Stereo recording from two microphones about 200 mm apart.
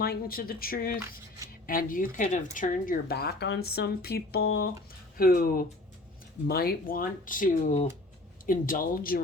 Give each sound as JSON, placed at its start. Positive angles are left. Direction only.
{"t": 0.0, "sound": "speech", "side_deg": 50}